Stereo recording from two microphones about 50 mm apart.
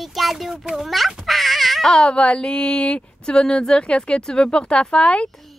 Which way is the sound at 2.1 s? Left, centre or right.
Left.